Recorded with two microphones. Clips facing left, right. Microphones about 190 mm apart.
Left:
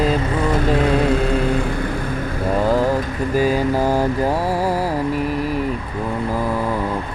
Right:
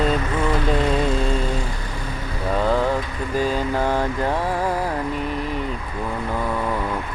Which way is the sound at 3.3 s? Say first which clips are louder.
Left 4 dB; 10° left (ahead or behind).